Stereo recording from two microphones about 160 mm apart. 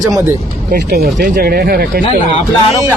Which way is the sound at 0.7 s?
85° right.